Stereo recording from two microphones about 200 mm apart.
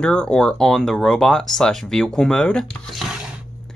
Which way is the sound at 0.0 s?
5° left (ahead or behind).